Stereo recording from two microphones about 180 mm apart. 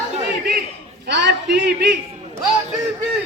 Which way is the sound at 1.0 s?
70° right (ahead or behind).